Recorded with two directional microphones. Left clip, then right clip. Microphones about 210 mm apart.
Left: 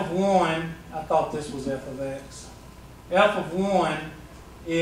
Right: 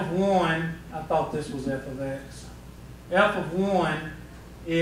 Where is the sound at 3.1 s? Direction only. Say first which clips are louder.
Left 2 dB; 5° left (ahead or behind).